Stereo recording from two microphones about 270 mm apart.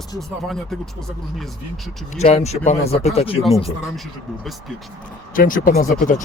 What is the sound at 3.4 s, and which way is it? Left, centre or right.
Speech, centre.